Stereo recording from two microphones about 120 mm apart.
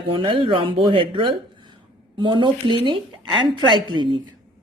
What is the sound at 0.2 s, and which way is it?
A woman's voice, 45° right (ahead or behind).